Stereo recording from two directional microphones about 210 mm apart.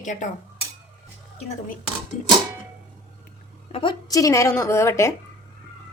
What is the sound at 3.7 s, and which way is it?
A woman's voice, 25° left (ahead or behind).